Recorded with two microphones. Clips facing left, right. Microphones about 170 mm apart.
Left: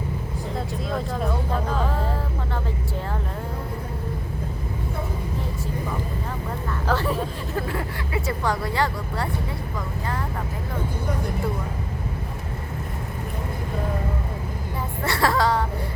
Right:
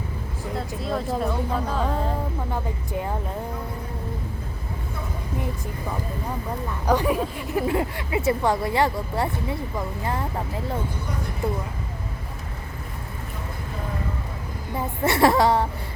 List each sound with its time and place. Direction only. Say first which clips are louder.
0.9 s speech: right 3 dB; centre (ahead or behind)
6.8 s speech: right 3 dB; 15° right (ahead or behind)
15.0 s speech: right 4 dB; 20° right (ahead or behind)